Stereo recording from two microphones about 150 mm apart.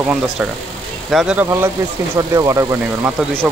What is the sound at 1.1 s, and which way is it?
Speech, 10° right (ahead or behind).